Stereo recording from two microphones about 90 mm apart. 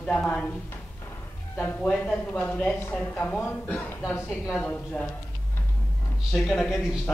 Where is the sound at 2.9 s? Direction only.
15° left (ahead or behind).